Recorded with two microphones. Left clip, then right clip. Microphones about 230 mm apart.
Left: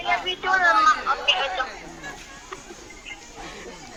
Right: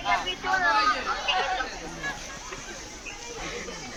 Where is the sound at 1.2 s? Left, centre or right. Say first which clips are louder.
Left 3 dB; left.